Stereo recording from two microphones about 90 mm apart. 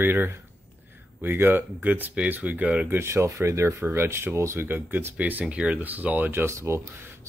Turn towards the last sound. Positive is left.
turn(degrees=-30)  # may be behind; listen again after turning